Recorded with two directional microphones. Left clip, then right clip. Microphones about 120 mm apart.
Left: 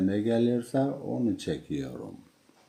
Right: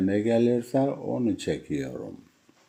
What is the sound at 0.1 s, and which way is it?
Speech, 10° right (ahead or behind).